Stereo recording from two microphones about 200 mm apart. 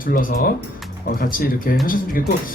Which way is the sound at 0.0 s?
45° left (ahead or behind).